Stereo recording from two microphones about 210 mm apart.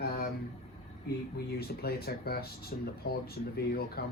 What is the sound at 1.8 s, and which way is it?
Speech, 50° left (ahead or behind).